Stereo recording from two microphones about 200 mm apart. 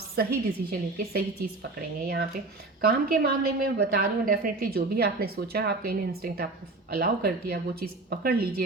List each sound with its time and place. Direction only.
0.2 s a woman's voice: 50° right (ahead or behind)
2.8 s a woman's voice: 50° right (ahead or behind)